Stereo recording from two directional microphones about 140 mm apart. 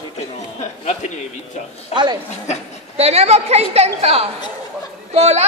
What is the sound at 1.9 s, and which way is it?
Speech, 30° right (ahead or behind).